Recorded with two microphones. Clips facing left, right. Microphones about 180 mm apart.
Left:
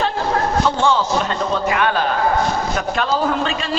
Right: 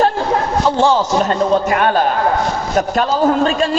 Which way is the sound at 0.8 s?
40° right (ahead or behind).